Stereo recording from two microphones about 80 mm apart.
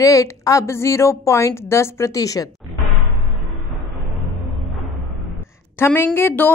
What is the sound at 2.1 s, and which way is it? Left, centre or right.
Speech, left.